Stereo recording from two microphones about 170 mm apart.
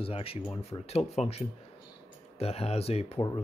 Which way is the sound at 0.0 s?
35° left (ahead or behind).